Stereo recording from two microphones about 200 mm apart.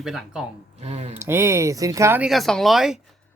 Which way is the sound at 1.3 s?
10° right (ahead or behind).